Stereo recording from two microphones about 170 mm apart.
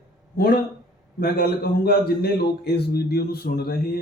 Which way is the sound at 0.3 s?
60° left (ahead or behind).